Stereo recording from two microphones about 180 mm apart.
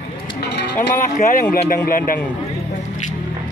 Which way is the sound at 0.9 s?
50° left (ahead or behind).